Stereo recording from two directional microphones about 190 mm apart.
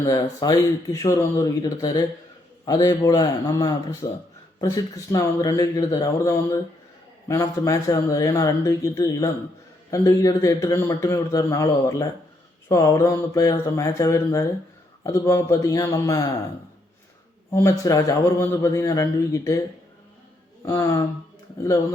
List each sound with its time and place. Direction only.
0.0 s a man's voice: 20° left (ahead or behind)
17.5 s a man's voice: 15° left (ahead or behind)
20.7 s a man's voice: 15° left (ahead or behind)